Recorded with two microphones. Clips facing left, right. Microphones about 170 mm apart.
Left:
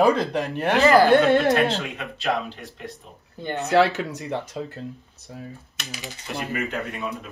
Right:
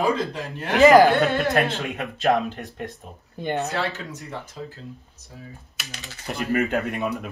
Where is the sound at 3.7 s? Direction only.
75° left (ahead or behind).